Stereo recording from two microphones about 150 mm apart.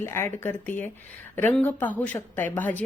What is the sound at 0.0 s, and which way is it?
A woman's voice, 15° left (ahead or behind).